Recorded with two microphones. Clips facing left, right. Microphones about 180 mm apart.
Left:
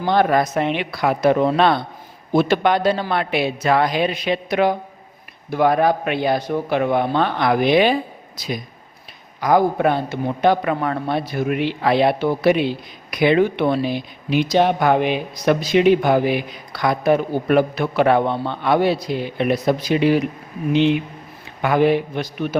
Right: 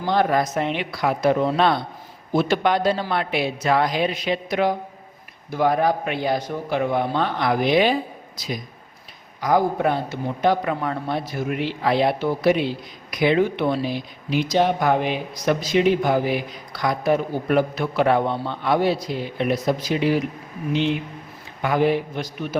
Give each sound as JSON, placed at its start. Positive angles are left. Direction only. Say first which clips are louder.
{"t": 0.0, "sound": "a man's voice", "louder": "left 3 dB", "side_deg": 65}